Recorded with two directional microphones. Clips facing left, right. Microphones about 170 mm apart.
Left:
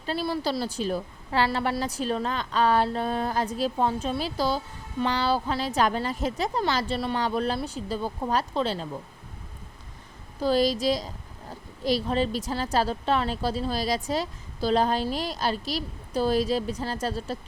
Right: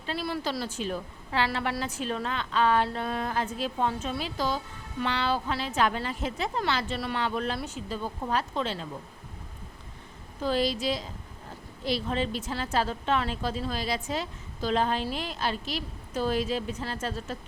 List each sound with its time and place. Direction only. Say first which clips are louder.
0.3 s a woman's voice: left 3 dB; 35° left (ahead or behind)
10.4 s a woman's voice: left 4 dB; 40° left (ahead or behind)